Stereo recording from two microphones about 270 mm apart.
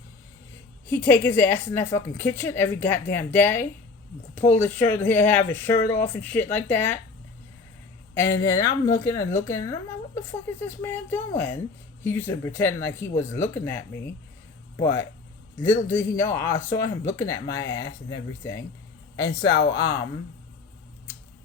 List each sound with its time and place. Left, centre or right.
0.9 s a woman's voice: centre
8.1 s a woman's voice: centre
19.2 s speech: left
19.7 s a woman's voice: centre